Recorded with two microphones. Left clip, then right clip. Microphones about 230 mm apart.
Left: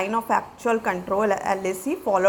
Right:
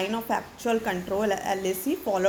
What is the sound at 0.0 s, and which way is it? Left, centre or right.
A woman's voice, centre.